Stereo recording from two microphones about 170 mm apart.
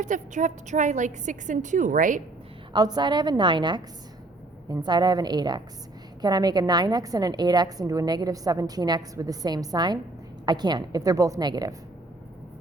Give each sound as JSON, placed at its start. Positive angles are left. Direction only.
{"t": 0.0, "sound": "a woman's voice", "side_deg": -45}
{"t": 2.7, "sound": "a woman's voice", "side_deg": -25}